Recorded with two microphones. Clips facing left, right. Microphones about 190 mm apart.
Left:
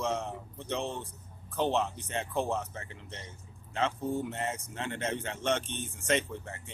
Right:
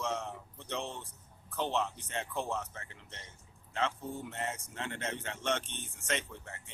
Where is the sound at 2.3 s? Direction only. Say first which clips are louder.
Left 6 dB; 30° left (ahead or behind).